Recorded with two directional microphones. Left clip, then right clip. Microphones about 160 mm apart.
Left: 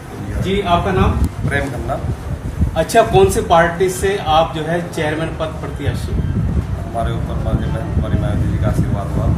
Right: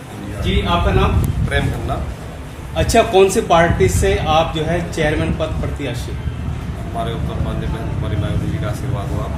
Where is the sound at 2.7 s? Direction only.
55° right (ahead or behind).